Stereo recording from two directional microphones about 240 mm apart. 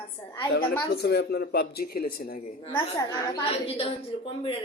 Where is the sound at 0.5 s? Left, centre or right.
Left.